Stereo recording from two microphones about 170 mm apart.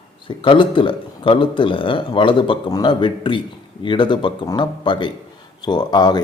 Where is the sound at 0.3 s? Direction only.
30° left (ahead or behind).